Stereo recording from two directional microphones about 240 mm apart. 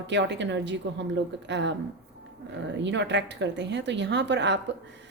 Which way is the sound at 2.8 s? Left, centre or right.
Right.